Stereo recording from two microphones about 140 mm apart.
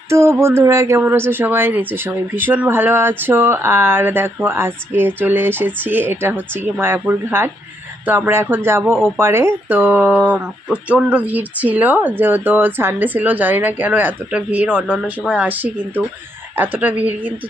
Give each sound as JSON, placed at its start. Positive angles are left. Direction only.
{"t": 0.1, "sound": "speech", "side_deg": -20}